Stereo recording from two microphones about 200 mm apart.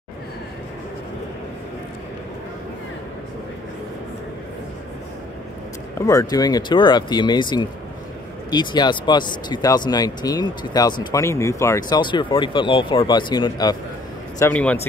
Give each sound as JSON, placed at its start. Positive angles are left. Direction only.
{"t": 5.9, "sound": "speech", "side_deg": 15}
{"t": 14.4, "sound": "a man's voice", "side_deg": 5}